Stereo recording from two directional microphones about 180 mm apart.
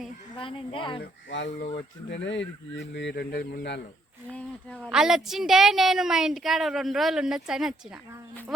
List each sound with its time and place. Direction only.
0.3 s speech: 30° left (ahead or behind)
1.3 s speech: 80° left; by 3.8 s 65° left (ahead or behind)
4.3 s a woman's voice: 5° left (ahead or behind)